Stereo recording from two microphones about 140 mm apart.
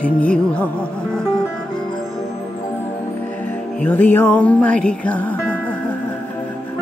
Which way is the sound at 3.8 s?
10° left (ahead or behind).